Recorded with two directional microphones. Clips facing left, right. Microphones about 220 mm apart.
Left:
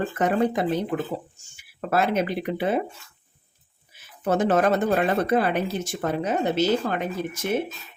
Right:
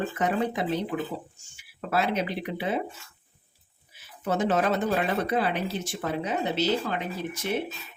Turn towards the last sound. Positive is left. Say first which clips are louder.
# left 4 dB
turn(degrees=50)  # may be behind; listen again after turning